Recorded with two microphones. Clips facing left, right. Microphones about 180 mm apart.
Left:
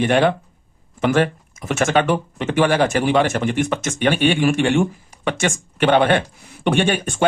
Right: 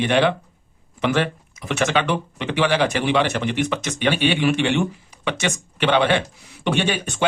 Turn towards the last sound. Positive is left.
turn(degrees=50)  # may be behind; listen again after turning